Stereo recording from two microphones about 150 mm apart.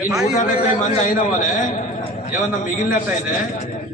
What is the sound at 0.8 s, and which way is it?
A man's voice, 60° left (ahead or behind).